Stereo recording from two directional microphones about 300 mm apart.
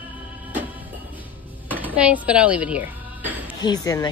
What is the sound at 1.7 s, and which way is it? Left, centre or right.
Speech, centre.